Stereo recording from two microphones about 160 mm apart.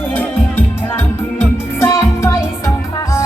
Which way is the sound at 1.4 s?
15° left (ahead or behind).